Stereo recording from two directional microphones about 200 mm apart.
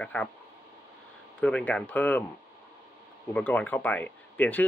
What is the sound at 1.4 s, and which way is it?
Speech, 5° left (ahead or behind).